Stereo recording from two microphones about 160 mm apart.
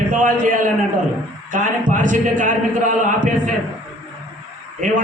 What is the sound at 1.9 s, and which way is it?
A man's voice, 55° right (ahead or behind).